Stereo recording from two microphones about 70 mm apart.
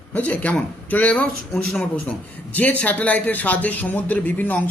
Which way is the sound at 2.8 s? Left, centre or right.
Centre.